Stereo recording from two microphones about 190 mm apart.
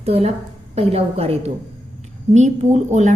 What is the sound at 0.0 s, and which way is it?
A woman's voice, 30° right (ahead or behind).